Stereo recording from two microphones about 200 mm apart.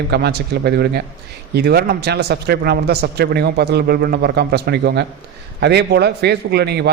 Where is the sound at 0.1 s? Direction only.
55° right (ahead or behind).